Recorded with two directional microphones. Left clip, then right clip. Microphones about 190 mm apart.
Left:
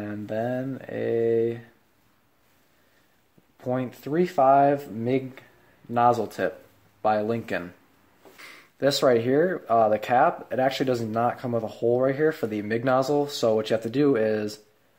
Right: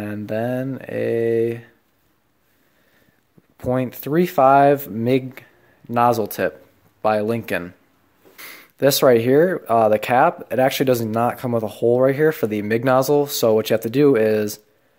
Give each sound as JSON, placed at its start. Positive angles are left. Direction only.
{"t": 0.0, "sound": "speech", "side_deg": -30}
{"t": 3.5, "sound": "speech", "side_deg": -30}